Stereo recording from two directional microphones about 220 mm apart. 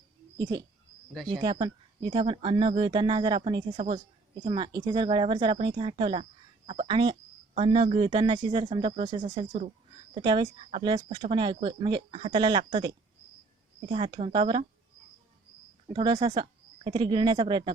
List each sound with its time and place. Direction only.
1.3 s speech: 20° right (ahead or behind)
15.9 s speech: 25° right (ahead or behind)